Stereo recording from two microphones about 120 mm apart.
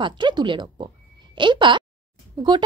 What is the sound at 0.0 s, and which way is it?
A woman's voice, 40° right (ahead or behind).